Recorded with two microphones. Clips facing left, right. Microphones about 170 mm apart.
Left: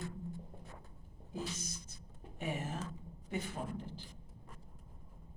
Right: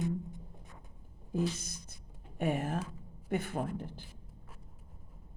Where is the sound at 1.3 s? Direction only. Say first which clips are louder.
Right 8 dB; 55° right (ahead or behind).